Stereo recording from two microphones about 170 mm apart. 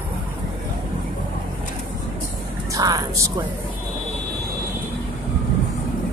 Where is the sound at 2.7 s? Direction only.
20° right (ahead or behind).